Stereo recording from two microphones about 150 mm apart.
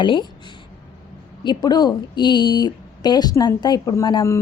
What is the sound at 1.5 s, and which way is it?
A woman's voice, 30° left (ahead or behind).